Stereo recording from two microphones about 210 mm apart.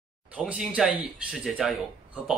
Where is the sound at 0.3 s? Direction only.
5° right (ahead or behind).